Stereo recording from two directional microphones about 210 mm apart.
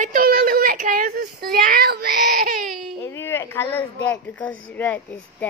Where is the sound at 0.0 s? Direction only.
40° right (ahead or behind).